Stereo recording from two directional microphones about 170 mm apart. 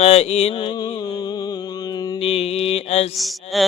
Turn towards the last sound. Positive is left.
turn(degrees=0)  # may be behind; listen again after turning